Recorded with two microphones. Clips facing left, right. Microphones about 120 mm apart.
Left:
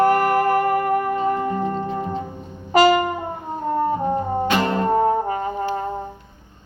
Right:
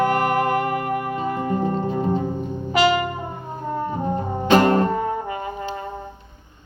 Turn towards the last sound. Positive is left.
turn(degrees=40)  # may be behind; listen again after turning